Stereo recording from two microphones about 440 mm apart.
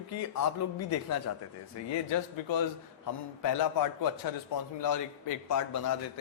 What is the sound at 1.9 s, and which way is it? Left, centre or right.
A man's voice, left.